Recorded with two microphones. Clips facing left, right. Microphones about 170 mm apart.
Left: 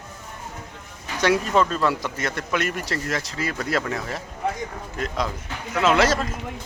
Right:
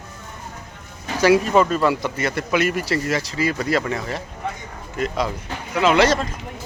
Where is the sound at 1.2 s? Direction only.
5° right (ahead or behind).